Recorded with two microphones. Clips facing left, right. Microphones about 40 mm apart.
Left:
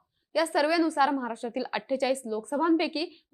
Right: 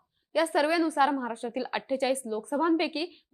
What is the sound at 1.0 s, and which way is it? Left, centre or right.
Speech, centre.